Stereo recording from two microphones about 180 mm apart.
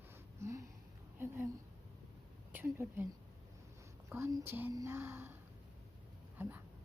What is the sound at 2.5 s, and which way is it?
Speech, 10° right (ahead or behind).